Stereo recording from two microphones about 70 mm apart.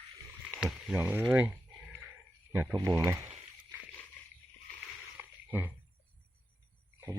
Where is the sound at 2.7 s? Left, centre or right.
Right.